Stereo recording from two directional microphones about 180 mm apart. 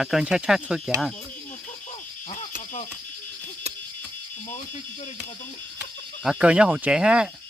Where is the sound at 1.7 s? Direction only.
45° left (ahead or behind).